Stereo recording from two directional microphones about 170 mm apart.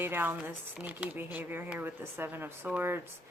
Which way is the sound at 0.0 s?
10° right (ahead or behind).